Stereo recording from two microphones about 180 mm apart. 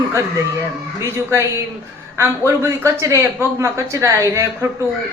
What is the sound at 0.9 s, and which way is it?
A woman's voice, 15° right (ahead or behind).